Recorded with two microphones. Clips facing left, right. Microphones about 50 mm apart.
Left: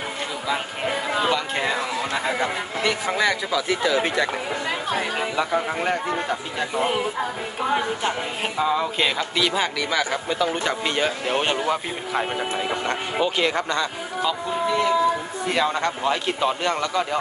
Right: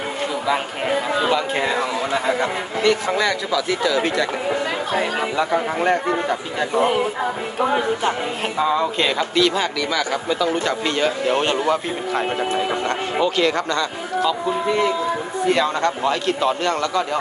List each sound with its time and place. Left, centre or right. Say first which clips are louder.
0.5 s speech: right 4 dB; centre
3.2 s speech: right 2 dB; centre
3.8 s speech: right 1 dB; left
5.8 s speech: right 5 dB; centre
9.9 s speech: right 1 dB; left; by 12.3 s centre
12.8 s speech: right 3 dB; centre
15.4 s speech: right 4 dB; centre